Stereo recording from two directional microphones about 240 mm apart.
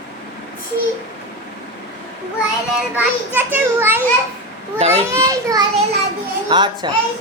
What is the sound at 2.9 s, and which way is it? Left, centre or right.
Speech, centre.